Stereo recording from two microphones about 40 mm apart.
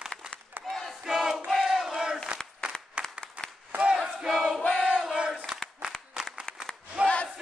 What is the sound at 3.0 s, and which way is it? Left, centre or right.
Applause, right.